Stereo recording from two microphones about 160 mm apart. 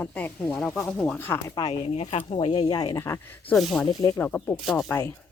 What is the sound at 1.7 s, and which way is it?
Speech, 40° left (ahead or behind).